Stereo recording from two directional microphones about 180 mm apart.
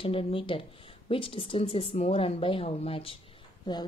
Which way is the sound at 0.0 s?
30° left (ahead or behind).